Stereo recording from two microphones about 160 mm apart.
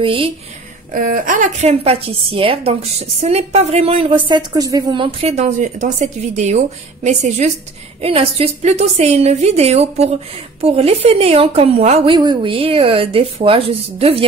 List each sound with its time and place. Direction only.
0.0 s a woman's voice: 35° right (ahead or behind)
0.9 s a woman's voice: 60° right (ahead or behind); by 12.2 s 40° right (ahead or behind)
12.2 s a woman's voice: 30° right (ahead or behind)